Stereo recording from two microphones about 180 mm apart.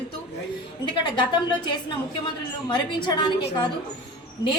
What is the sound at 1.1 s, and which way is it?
A woman's voice, 25° left (ahead or behind).